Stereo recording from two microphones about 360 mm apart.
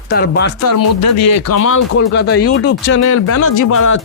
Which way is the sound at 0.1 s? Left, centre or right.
Left.